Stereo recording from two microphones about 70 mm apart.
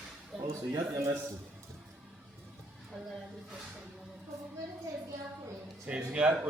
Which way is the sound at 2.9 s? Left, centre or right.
Centre.